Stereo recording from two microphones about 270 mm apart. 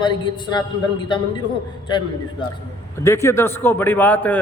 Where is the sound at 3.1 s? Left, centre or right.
Centre.